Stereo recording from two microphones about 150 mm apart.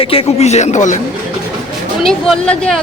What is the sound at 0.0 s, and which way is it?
Speech, 40° left (ahead or behind).